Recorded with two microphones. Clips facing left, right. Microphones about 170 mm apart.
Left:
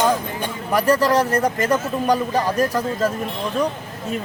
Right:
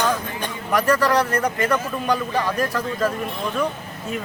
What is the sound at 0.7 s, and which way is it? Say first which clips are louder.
Speech: left 2 dB; 40° left (ahead or behind).